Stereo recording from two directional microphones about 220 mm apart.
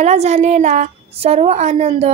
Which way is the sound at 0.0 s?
30° right (ahead or behind).